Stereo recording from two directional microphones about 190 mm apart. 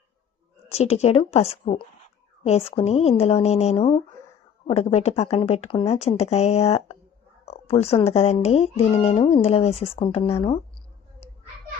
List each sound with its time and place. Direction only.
0.7 s speech: 35° left (ahead or behind)
7.4 s a sound: 35° left (ahead or behind)
8.1 s speech: 35° left (ahead or behind)